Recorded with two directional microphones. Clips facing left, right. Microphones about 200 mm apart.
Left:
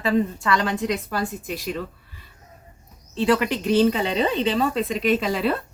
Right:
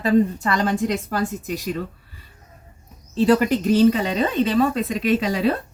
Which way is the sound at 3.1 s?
40° right (ahead or behind).